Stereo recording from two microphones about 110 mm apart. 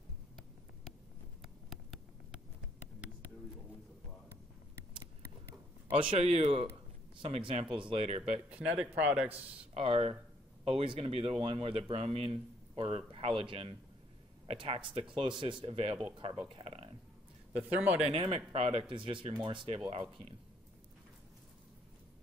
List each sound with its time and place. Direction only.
1.4 s a sound: centre (ahead or behind)
5.9 s speech: 60° right (ahead or behind)
7.2 s speech: 60° right (ahead or behind)
8.5 s speech: 10° right (ahead or behind)
9.8 s speech: 60° right (ahead or behind)
16.4 s a sound: 55° right (ahead or behind)
17.5 s speech: 15° right (ahead or behind)
18.1 s speech: 55° right (ahead or behind)